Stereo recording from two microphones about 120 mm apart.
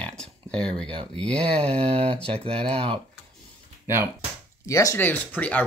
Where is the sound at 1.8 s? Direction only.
55° right (ahead or behind).